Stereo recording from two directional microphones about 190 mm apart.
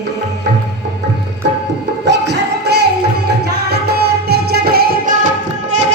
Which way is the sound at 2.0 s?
65° right (ahead or behind).